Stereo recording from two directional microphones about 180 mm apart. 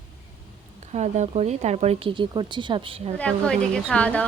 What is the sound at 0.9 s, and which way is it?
A woman's voice, 40° right (ahead or behind).